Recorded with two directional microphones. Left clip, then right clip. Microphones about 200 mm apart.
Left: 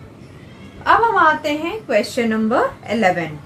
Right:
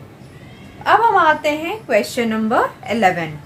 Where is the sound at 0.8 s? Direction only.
30° right (ahead or behind).